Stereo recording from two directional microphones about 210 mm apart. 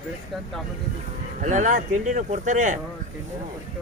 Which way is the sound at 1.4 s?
35° right (ahead or behind).